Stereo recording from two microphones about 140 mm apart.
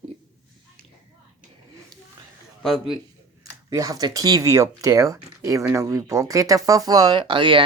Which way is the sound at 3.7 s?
25° right (ahead or behind).